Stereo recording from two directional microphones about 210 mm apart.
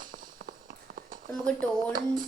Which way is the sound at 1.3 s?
5° left (ahead or behind).